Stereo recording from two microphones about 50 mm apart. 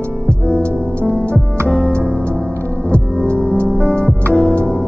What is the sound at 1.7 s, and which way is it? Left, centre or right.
Music, centre.